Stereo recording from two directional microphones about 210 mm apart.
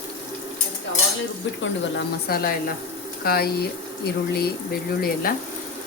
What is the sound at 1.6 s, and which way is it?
Speech, 50° left (ahead or behind).